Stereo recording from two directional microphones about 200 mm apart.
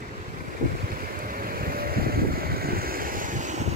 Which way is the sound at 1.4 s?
45° right (ahead or behind).